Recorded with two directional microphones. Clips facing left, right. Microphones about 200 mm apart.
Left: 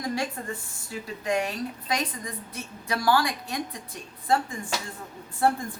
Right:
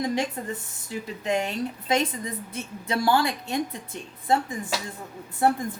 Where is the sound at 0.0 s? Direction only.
20° right (ahead or behind).